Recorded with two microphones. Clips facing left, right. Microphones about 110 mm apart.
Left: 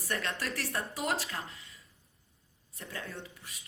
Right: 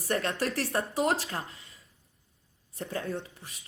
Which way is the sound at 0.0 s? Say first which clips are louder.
Right 6 dB; 30° right (ahead or behind).